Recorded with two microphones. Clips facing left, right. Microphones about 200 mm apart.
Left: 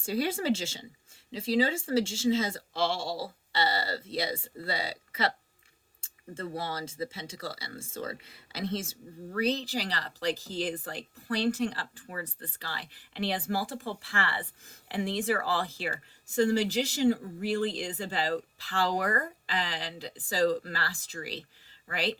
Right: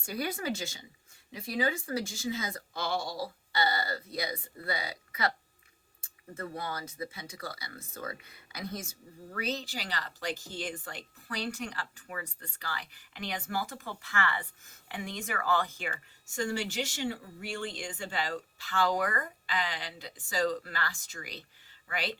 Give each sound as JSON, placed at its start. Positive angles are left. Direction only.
{"t": 0.0, "sound": "speech", "side_deg": 30}